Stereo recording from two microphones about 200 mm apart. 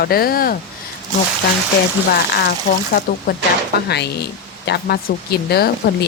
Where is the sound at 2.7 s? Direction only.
40° left (ahead or behind).